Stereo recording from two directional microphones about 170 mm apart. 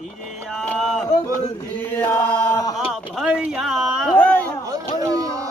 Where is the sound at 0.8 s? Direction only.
Centre (ahead or behind).